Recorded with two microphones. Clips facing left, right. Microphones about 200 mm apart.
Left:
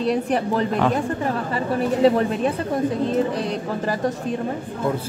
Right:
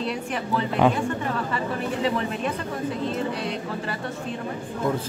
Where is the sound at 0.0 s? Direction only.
40° left (ahead or behind).